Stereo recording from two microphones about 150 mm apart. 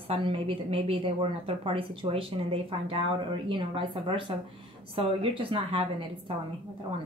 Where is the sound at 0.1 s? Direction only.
35° right (ahead or behind).